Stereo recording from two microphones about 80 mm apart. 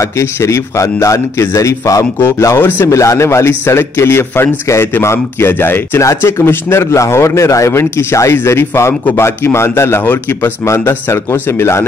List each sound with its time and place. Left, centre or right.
0.0 s a man's voice: left
2.4 s speech: left
2.9 s a man's voice: left